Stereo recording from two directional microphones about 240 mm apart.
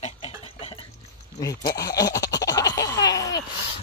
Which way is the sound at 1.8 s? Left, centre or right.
Centre.